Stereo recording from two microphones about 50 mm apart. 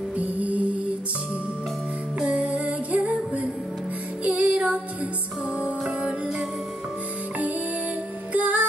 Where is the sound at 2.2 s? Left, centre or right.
Right.